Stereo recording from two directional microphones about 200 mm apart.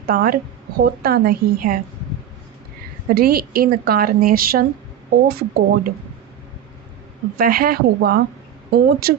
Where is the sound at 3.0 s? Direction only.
50° right (ahead or behind).